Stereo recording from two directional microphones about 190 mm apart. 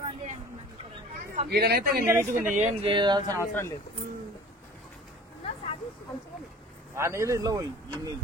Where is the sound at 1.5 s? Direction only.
55° right (ahead or behind).